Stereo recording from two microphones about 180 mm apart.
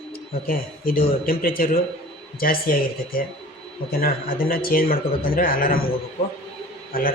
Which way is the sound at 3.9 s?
55° left (ahead or behind).